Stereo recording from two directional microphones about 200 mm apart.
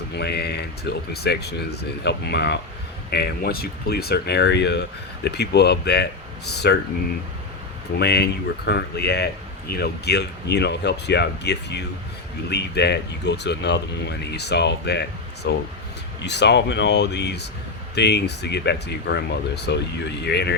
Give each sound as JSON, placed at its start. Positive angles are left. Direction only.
{"t": 0.1, "sound": "speech", "side_deg": 55}
{"t": 7.9, "sound": "speech", "side_deg": 55}